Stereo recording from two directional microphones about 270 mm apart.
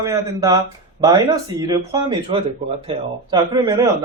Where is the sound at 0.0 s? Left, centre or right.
Centre.